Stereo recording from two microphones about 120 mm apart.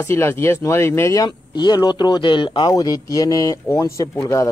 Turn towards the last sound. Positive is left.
turn(degrees=25)  # may be behind; listen again after turning